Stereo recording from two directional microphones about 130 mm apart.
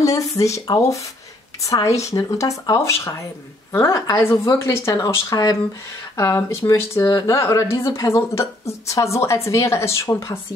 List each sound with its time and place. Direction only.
0.0 s speech: 25° left (ahead or behind)